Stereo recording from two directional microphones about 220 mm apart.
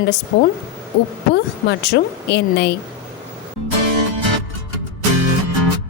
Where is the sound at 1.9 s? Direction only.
50° left (ahead or behind).